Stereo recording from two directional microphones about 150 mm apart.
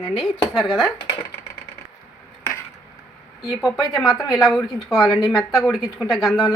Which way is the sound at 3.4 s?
Centre (ahead or behind).